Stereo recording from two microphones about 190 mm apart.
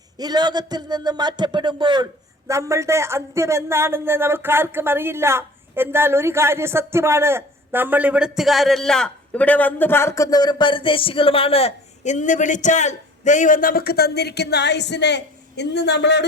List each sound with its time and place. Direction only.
0.2 s speech: 20° right (ahead or behind); by 16.2 s 65° left (ahead or behind)